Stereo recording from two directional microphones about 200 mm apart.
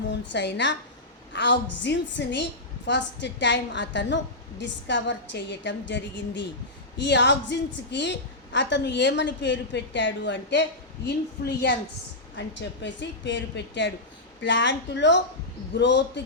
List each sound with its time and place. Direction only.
0.1 s a woman's voice: 60° left (ahead or behind)